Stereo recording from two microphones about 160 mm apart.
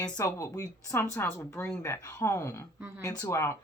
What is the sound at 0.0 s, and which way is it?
A woman's voice, 20° left (ahead or behind).